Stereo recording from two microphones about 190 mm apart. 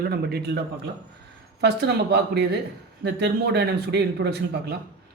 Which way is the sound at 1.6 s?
60° right (ahead or behind).